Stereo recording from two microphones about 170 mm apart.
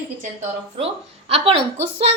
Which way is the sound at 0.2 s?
40° right (ahead or behind).